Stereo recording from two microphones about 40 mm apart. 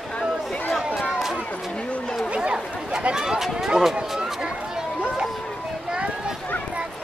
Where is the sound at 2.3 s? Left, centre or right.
Right.